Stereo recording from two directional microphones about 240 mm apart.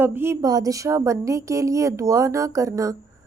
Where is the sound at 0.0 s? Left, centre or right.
Centre.